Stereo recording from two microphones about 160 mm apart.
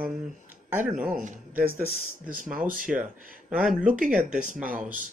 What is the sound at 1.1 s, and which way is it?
Speech, 55° right (ahead or behind).